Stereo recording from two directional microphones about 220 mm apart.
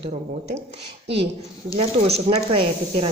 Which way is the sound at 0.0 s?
30° right (ahead or behind).